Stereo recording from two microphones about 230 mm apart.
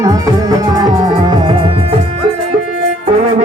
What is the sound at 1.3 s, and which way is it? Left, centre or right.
Music, right.